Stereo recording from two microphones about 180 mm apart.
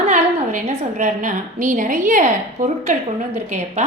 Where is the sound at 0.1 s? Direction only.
40° right (ahead or behind).